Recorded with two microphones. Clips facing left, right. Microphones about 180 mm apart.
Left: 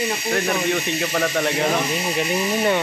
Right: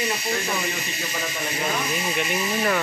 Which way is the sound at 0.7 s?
70° left (ahead or behind).